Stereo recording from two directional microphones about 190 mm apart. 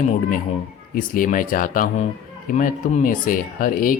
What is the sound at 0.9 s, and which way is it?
Speech, 45° left (ahead or behind).